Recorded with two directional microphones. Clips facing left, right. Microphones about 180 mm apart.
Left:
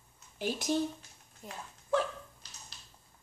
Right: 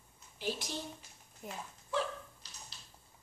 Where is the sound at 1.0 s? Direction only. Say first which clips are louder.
Right 1 dB; 5° right (ahead or behind).